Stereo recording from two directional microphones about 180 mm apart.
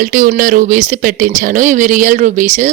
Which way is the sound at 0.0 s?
50° right (ahead or behind).